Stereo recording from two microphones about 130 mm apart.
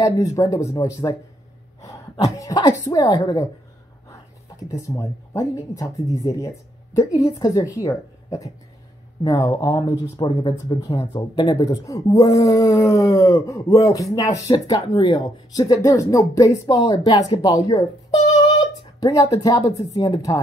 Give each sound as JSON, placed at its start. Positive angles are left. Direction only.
{"t": 0.0, "sound": "speech", "side_deg": 30}
{"t": 4.6, "sound": "speech", "side_deg": 25}
{"t": 17.4, "sound": "a sound", "side_deg": 30}
{"t": 19.3, "sound": "speech", "side_deg": 25}